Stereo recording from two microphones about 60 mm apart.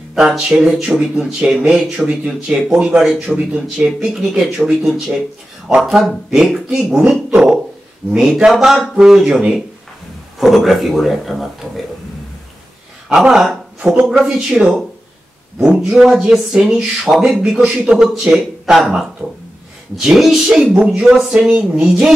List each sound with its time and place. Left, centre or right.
0.1 s speech: centre
5.8 s speech: centre
13.1 s speech: centre
15.8 s speech: centre
20.0 s speech: centre
20.7 s speech: right
21.2 s speech: centre